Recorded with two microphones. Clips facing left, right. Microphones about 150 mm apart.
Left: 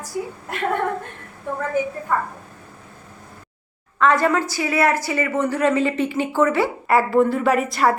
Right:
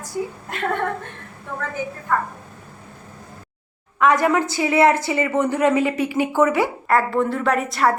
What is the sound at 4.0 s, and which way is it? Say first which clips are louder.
A woman's voice: right 1 dB; 15° right (ahead or behind).